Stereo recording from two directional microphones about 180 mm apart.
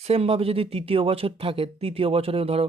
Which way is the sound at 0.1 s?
35° right (ahead or behind).